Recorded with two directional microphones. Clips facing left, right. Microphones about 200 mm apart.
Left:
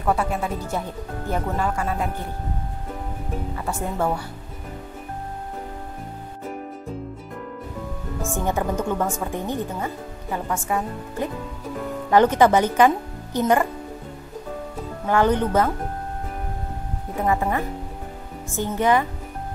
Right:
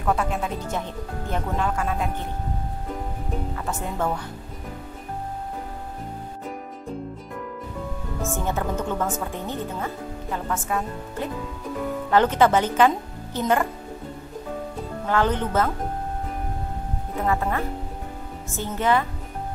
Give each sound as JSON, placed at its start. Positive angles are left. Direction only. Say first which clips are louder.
{"t": 0.0, "sound": "a woman's voice", "louder": "left 1 dB", "side_deg": 5}
{"t": 3.5, "sound": "a woman's voice", "louder": "left 2 dB", "side_deg": 10}
{"t": 8.2, "sound": "a woman's voice", "louder": "left 2 dB", "side_deg": 15}
{"t": 15.0, "sound": "a woman's voice", "louder": "left 4 dB", "side_deg": 15}
{"t": 17.3, "sound": "a woman's voice", "louder": "left 2 dB", "side_deg": 15}